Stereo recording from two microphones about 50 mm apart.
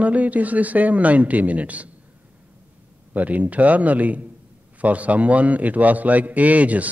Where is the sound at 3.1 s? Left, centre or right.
Right.